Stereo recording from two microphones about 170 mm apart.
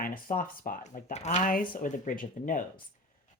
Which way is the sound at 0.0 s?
55° left (ahead or behind).